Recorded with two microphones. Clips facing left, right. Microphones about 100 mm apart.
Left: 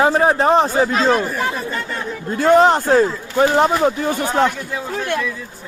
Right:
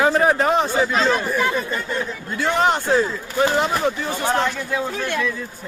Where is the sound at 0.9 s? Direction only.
45° left (ahead or behind).